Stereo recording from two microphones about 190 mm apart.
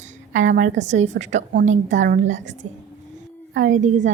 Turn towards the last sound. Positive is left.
turn(degrees=-40)  # may be behind; listen again after turning